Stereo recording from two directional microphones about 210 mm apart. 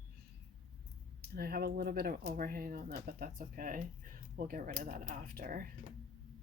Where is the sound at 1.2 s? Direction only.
45° right (ahead or behind).